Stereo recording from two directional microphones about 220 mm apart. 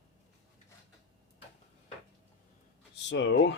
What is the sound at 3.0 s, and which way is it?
Speech, 55° left (ahead or behind).